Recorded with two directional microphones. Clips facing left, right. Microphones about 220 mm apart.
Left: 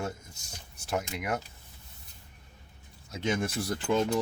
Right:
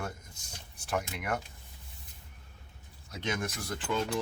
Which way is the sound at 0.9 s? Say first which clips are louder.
Left 2 dB; 5° left (ahead or behind).